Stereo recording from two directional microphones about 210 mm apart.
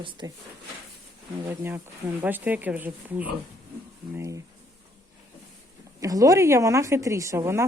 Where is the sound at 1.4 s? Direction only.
10° right (ahead or behind).